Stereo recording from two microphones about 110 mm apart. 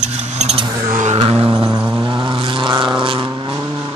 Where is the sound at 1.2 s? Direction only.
55° right (ahead or behind).